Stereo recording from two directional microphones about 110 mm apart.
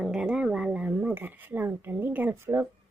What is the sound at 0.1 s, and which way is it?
Speech, 5° right (ahead or behind).